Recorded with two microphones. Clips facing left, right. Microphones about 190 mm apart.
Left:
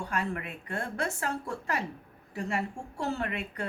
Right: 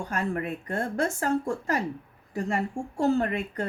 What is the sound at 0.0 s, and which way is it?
A woman's voice, 45° right (ahead or behind).